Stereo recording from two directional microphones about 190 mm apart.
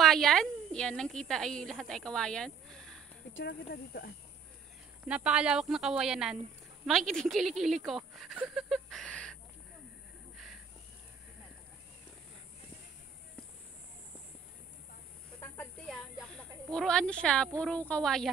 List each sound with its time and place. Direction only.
0.0 s a woman's voice: centre (ahead or behind)
3.3 s speech: 60° left (ahead or behind)
5.0 s speech: 5° right (ahead or behind)
10.3 s a sound: centre (ahead or behind)
15.4 s snake: 10° left (ahead or behind)
16.7 s a woman's voice: 5° left (ahead or behind)